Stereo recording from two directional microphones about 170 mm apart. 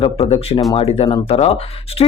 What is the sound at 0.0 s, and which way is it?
Speech, 35° left (ahead or behind).